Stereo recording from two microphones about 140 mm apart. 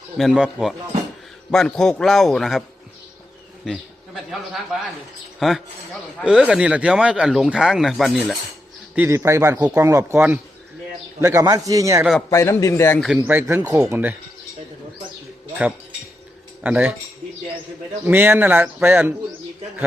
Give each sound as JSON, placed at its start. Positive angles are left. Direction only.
{"t": 0.2, "sound": "speech", "side_deg": -5}
{"t": 3.7, "sound": "a man's voice", "side_deg": 0}
{"t": 9.0, "sound": "a man's voice", "side_deg": -20}
{"t": 12.3, "sound": "a man's voice", "side_deg": 20}
{"t": 13.2, "sound": "speech", "side_deg": -15}
{"t": 13.6, "sound": "a man's voice", "side_deg": -25}
{"t": 13.9, "sound": "speech", "side_deg": -15}
{"t": 16.6, "sound": "speech", "side_deg": -10}
{"t": 18.0, "sound": "speech", "side_deg": -15}